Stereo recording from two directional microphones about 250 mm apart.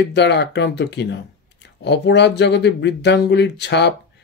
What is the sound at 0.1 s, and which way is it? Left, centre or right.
Speech, left.